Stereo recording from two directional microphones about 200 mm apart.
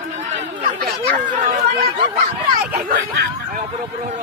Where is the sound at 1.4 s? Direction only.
35° right (ahead or behind).